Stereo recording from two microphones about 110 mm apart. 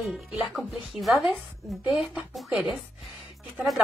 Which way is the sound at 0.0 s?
Centre (ahead or behind).